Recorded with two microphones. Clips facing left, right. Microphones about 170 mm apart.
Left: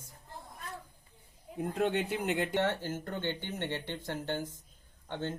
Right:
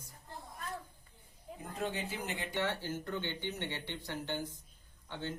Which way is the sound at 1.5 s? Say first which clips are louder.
Left 8 dB; 65° left (ahead or behind).